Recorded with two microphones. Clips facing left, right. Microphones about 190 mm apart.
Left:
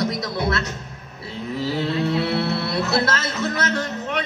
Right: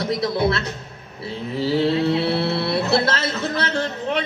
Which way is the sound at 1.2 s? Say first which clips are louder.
Right 2 dB; 30° right (ahead or behind).